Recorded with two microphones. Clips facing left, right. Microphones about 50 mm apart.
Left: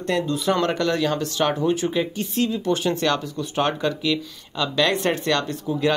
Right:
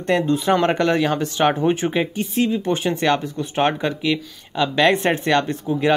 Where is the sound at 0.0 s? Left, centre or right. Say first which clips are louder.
Right 4 dB; right.